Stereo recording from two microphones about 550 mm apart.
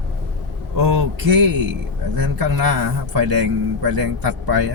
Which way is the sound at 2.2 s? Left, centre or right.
Right.